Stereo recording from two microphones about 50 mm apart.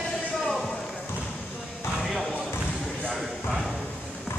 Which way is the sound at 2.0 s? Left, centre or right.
Centre.